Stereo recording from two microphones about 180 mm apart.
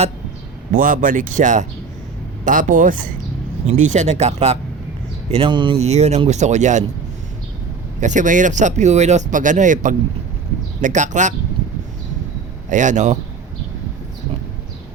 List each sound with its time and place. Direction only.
0.7 s speech: 50° right (ahead or behind)
8.0 s speech: 45° right (ahead or behind)
12.7 s speech: 45° right (ahead or behind)